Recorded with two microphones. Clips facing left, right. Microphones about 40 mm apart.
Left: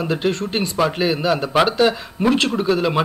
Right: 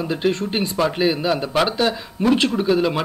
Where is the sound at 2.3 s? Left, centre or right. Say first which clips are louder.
Even; centre.